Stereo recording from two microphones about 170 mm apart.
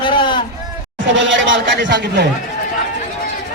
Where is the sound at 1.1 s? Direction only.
90° right.